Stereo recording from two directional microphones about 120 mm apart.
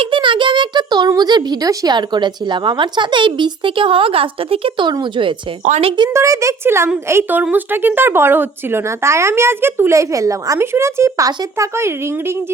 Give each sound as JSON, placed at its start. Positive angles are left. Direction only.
{"t": 0.0, "sound": "a child's voice", "side_deg": -45}
{"t": 6.1, "sound": "speech", "side_deg": -25}